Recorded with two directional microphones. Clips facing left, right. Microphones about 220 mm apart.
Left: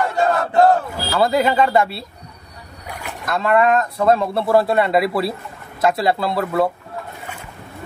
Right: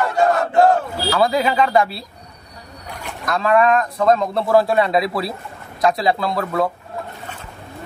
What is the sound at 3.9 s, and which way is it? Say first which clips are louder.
Speech: even; 5° left (ahead or behind).